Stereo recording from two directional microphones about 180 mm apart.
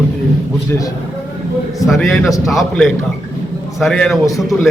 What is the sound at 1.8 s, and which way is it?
A man's voice, centre (ahead or behind).